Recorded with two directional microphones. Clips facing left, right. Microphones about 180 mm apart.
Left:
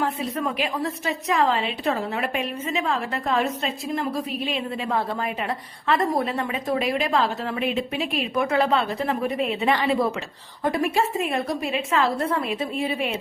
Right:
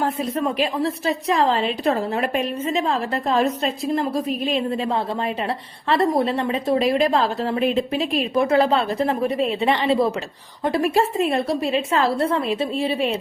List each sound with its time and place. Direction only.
0.0 s speech: 40° right (ahead or behind)
0.4 s a woman's voice: 30° right (ahead or behind)
5.9 s a woman's voice: 30° right (ahead or behind)